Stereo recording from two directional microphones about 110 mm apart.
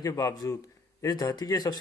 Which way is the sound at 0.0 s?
35° left (ahead or behind).